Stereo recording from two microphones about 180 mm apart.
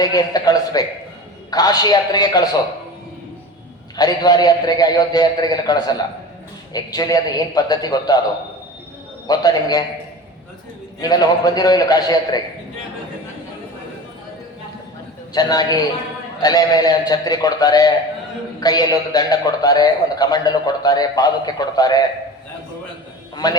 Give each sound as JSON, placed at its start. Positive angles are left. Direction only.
{"t": 0.0, "sound": "a man's voice", "side_deg": 20}
{"t": 3.9, "sound": "a man's voice", "side_deg": 20}
{"t": 9.2, "sound": "a man's voice", "side_deg": 20}
{"t": 11.0, "sound": "a man's voice", "side_deg": 20}
{"t": 15.3, "sound": "a man's voice", "side_deg": 20}
{"t": 23.3, "sound": "a man's voice", "side_deg": 20}